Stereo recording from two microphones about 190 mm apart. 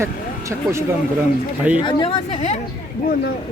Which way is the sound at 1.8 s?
25° left (ahead or behind).